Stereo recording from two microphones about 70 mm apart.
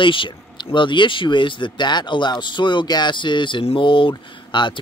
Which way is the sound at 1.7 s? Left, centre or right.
Left.